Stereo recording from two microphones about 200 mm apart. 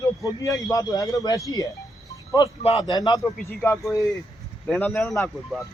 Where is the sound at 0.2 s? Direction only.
15° left (ahead or behind).